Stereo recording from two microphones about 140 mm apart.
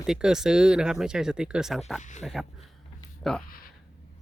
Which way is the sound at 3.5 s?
90° left.